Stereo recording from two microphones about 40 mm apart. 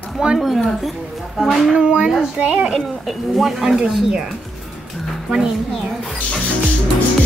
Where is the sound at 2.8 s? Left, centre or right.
Centre.